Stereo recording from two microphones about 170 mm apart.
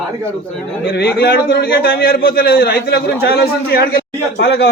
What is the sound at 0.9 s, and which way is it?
A man's voice, 65° left (ahead or behind).